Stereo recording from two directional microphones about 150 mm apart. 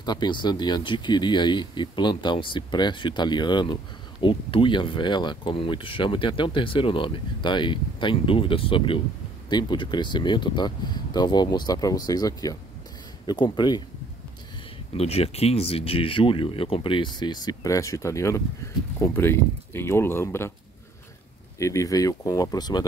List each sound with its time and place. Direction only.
0.0 s speech: 30° left (ahead or behind)
15.0 s speech: 40° left (ahead or behind); by 20.5 s 15° left (ahead or behind)
21.5 s speech: 20° left (ahead or behind)